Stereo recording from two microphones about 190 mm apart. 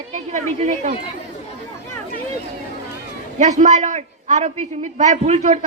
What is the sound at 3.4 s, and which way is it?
A woman's voice, 40° right (ahead or behind).